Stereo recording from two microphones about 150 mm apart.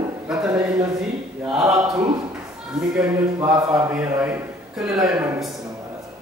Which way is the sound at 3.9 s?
10° right (ahead or behind).